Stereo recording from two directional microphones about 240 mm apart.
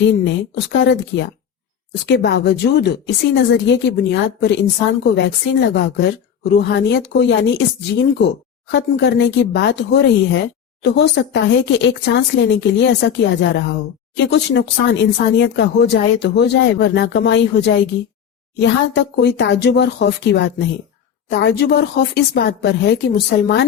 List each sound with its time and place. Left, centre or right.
0.5 s speech: left